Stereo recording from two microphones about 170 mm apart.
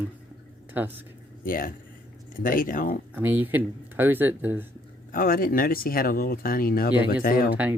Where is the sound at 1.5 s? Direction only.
55° left (ahead or behind).